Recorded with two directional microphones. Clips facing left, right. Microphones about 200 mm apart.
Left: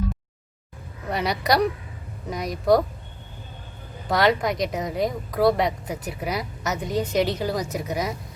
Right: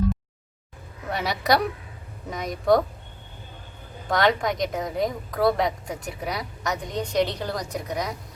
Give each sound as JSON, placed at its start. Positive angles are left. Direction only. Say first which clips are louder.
{"t": 1.1, "sound": "a woman's voice", "louder": "left 1 dB", "side_deg": 0}
{"t": 4.1, "sound": "a woman's voice", "louder": "left 1 dB", "side_deg": 0}